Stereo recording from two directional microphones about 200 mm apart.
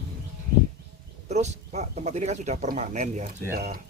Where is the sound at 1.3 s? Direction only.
35° right (ahead or behind).